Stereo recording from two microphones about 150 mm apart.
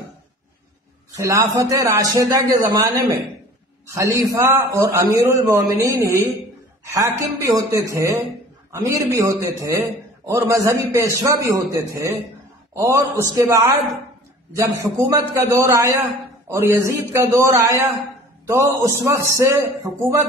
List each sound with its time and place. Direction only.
1.1 s a man's voice: 20° right (ahead or behind)